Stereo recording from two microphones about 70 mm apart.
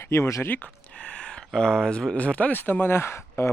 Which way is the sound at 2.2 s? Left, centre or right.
Centre.